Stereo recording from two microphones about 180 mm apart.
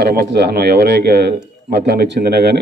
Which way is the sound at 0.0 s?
60° right (ahead or behind).